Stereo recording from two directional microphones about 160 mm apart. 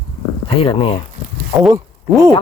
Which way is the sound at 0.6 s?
35° left (ahead or behind).